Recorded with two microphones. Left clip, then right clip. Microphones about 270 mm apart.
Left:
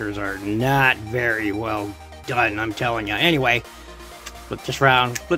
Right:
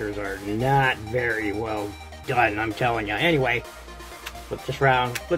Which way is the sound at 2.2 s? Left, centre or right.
Left.